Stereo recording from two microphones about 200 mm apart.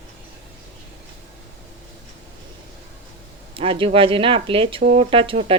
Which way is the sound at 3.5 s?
25° right (ahead or behind).